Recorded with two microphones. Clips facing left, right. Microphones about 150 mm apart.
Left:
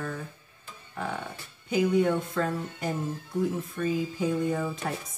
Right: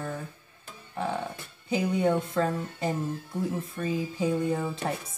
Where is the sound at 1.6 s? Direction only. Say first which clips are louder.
Left 2 dB; 25° right (ahead or behind).